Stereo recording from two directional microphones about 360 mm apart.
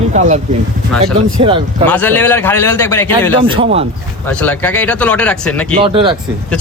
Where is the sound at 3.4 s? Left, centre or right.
Centre.